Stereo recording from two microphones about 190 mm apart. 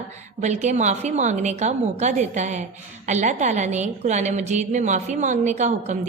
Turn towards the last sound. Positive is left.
turn(degrees=-40)  # may be behind; listen again after turning